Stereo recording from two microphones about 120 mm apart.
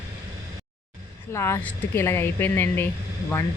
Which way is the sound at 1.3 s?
20° left (ahead or behind).